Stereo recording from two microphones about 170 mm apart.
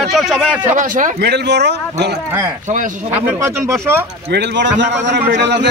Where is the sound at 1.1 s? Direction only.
75° right (ahead or behind).